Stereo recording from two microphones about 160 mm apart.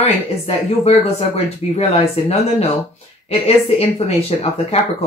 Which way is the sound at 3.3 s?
40° left (ahead or behind).